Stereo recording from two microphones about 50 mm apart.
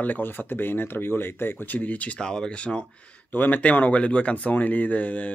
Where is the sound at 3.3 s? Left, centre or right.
Left.